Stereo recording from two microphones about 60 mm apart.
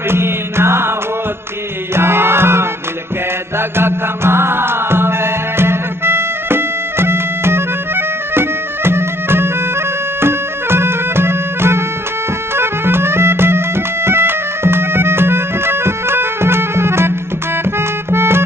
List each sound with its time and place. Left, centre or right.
0.1 s music: right
2.0 s music: right
17.7 s accordion: right